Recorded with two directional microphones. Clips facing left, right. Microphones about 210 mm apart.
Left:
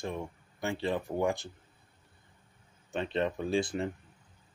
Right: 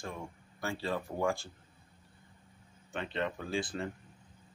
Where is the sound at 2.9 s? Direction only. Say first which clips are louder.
Left 5 dB; 20° left (ahead or behind).